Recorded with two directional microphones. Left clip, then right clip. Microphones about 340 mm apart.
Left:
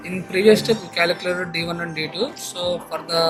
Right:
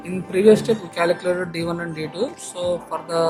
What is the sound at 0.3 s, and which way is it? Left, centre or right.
Speech, right.